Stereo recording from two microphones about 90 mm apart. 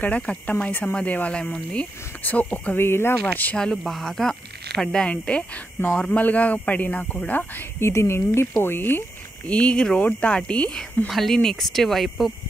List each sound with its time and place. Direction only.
0.0 s speech: 15° left (ahead or behind)
3.5 s speech: 5° left (ahead or behind)